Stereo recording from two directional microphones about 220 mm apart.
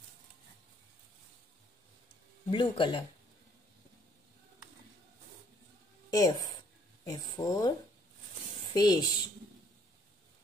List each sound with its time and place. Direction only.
2.5 s speech: 20° left (ahead or behind)
6.1 s speech: 15° left (ahead or behind)
8.7 s speech: 20° left (ahead or behind)